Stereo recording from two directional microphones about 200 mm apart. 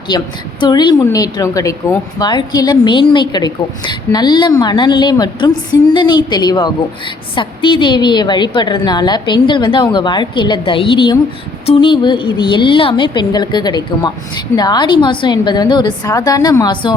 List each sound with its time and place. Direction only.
0.1 s a woman's voice: 20° left (ahead or behind)